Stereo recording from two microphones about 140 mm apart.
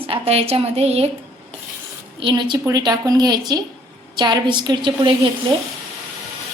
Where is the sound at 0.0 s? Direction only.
45° right (ahead or behind).